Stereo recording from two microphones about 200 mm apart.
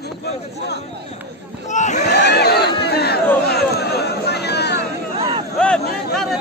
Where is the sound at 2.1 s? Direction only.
55° left (ahead or behind).